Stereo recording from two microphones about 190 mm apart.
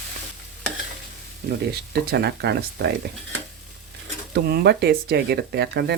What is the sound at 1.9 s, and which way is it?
Speech, 60° right (ahead or behind).